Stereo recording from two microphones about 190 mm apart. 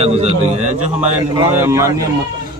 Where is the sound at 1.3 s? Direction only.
15° right (ahead or behind).